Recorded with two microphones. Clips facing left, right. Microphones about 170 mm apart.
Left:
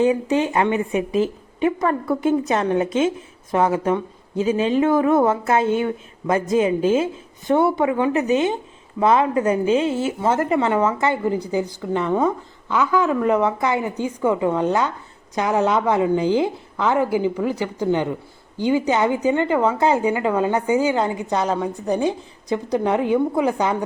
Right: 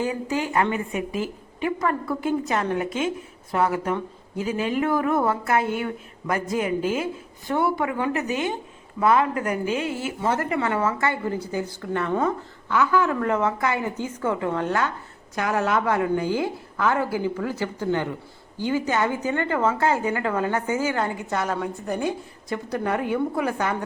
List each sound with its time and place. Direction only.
0.0 s a woman's voice: 20° left (ahead or behind)